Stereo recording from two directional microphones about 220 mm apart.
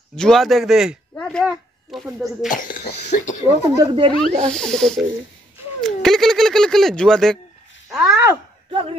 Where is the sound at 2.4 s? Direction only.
40° left (ahead or behind).